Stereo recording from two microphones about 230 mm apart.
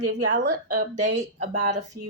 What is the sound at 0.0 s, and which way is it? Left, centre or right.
Speech, right.